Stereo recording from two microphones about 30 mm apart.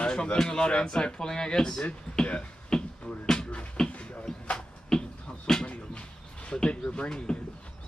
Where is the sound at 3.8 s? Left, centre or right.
Centre.